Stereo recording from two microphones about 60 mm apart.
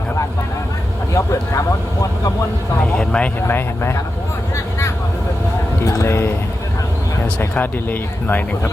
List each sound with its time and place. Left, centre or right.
1.1 s speech: left
3.0 s speech: centre
3.4 s speech: left
5.8 s speech: left
6.1 s speech: left
7.5 s speech: left